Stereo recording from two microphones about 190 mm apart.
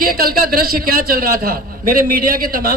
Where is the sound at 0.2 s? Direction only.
50° right (ahead or behind).